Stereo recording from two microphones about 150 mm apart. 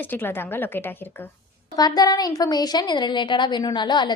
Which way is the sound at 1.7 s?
25° left (ahead or behind).